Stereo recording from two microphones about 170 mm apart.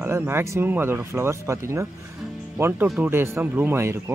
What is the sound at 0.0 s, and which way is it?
Speech, 15° right (ahead or behind).